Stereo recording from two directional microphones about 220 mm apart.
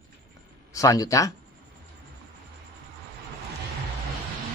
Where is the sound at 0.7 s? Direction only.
15° left (ahead or behind).